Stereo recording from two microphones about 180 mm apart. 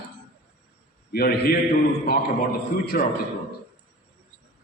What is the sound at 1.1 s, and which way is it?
Speech, 60° left (ahead or behind).